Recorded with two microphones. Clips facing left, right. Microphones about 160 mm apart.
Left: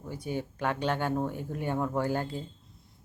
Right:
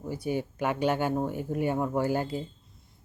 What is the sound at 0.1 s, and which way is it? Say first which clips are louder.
Speech: right 4 dB; 10° right (ahead or behind).